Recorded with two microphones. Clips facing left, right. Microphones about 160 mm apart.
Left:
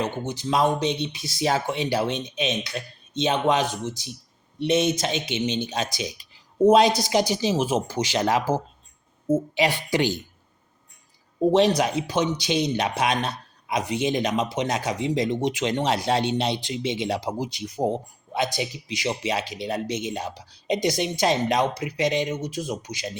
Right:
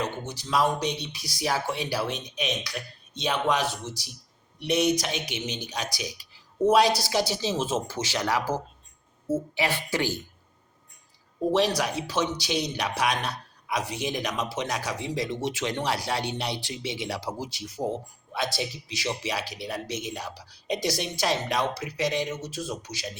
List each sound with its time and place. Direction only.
0.0 s speech: 20° left (ahead or behind)
11.5 s speech: 20° left (ahead or behind)